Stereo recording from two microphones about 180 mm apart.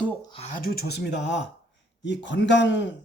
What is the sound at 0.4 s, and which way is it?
Speech, 50° left (ahead or behind).